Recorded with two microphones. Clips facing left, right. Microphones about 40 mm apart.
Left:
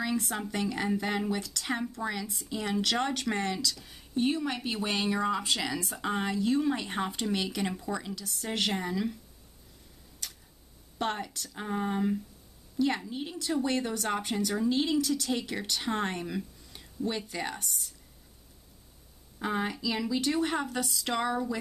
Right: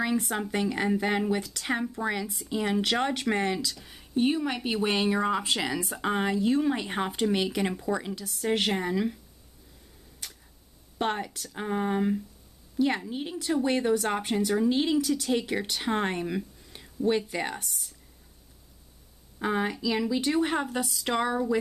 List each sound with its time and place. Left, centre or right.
0.0 s a woman's voice: centre
10.2 s tick-tock: centre
11.0 s a woman's voice: centre
17.6 s speech: centre
19.3 s a woman's voice: centre